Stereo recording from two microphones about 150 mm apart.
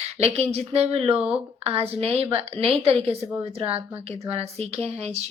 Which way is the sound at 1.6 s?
40° right (ahead or behind).